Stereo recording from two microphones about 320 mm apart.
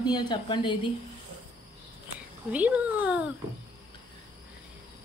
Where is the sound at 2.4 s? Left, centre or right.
Centre.